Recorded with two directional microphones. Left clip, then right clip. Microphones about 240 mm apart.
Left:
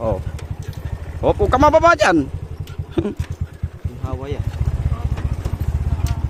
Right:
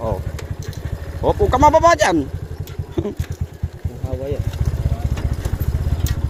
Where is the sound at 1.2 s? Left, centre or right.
Centre.